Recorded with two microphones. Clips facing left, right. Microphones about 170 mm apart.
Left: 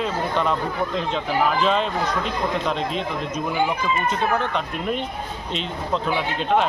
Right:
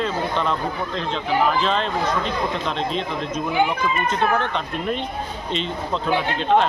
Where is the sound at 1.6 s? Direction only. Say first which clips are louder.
Left 1 dB; 5° left (ahead or behind).